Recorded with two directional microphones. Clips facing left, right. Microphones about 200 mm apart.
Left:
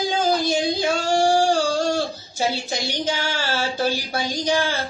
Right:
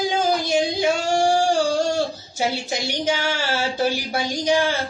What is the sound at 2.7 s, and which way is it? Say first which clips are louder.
Speech: right 2 dB; 20° right (ahead or behind).